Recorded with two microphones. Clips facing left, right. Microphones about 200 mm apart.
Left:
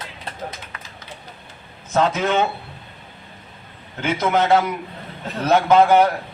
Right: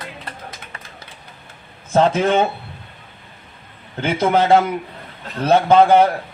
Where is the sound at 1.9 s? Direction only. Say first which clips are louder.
Right 4 dB; 30° right (ahead or behind).